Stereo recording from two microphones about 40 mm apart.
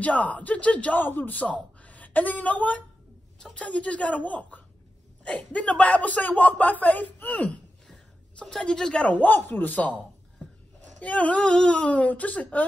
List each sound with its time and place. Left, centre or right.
0.0 s speech: left
0.9 s a woman's voice: left
3.3 s speech: left
8.5 s speech: centre
8.9 s speech: left
9.5 s a man's voice: left
11.0 s speech: left